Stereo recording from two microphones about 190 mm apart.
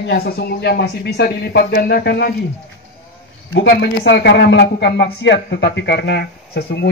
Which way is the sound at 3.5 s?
60° left (ahead or behind).